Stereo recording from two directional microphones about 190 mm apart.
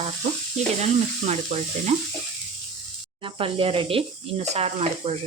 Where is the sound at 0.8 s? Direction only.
35° right (ahead or behind).